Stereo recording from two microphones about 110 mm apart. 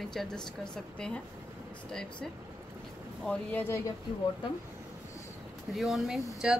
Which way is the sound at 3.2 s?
15° left (ahead or behind).